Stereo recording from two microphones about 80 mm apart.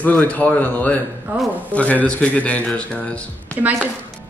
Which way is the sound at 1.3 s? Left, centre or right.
Right.